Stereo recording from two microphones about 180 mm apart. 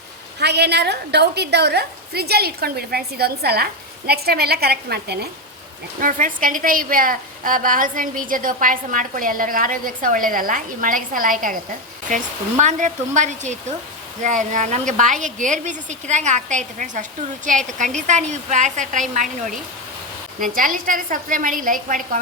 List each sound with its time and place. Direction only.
0.3 s a woman's voice: 65° right (ahead or behind)
6.0 s a woman's voice: 45° right (ahead or behind)